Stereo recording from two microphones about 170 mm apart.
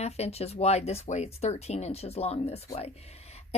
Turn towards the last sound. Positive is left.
turn(degrees=40)  # may be behind; listen again after turning